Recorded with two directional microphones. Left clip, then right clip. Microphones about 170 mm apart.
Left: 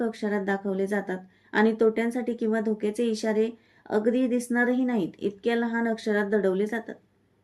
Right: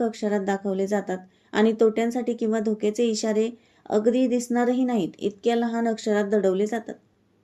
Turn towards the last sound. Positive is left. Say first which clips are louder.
# right 3 dB
turn(degrees=-35)  # may be behind; listen again after turning